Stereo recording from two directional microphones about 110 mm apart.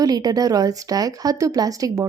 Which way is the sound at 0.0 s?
35° right (ahead or behind).